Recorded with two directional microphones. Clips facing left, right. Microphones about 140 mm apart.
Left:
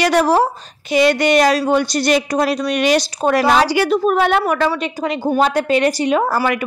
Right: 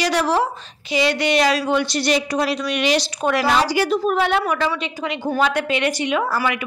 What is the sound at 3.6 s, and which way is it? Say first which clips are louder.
A woman's voice: left 4 dB; 70° left (ahead or behind).